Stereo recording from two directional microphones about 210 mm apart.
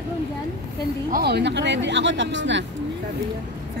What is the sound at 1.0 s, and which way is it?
Speech, 45° right (ahead or behind).